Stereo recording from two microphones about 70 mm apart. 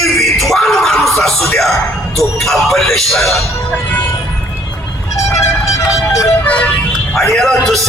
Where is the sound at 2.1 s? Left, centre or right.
Centre.